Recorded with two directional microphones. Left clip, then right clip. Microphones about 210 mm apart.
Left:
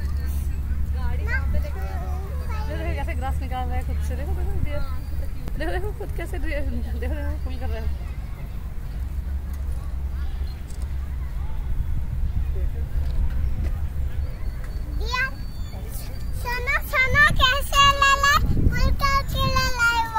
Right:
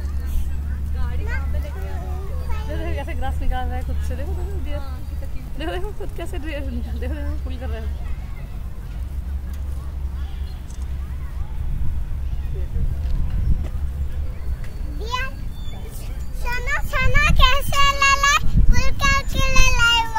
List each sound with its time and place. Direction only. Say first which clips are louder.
1.2 s vehicle: left 4 dB; 20° right (ahead or behind)
2.5 s a sound: right 1 dB; 25° right (ahead or behind)
5.6 s speech: right 1 dB; 40° right (ahead or behind)
15.0 s children playing: left 1 dB; 20° right (ahead or behind)
16.4 s a sound: even; 25° right (ahead or behind)
17.8 s child singing: right 2 dB; 10° right (ahead or behind)